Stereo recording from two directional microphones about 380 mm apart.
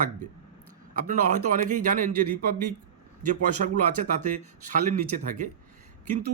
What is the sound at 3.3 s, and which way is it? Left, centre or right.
A man's voice, centre.